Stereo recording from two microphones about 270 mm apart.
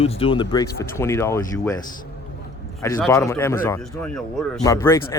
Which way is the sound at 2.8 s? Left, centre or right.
Centre.